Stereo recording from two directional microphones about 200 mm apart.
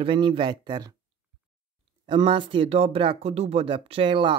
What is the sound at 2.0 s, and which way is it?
Speech, 25° right (ahead or behind).